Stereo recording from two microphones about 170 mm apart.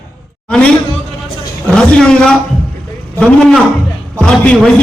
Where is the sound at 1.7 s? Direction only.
5° left (ahead or behind).